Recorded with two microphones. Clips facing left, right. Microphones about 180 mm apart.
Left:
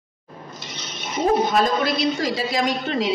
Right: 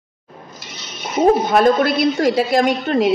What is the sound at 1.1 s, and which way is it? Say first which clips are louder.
A woman's voice: right 5 dB; 55° right (ahead or behind).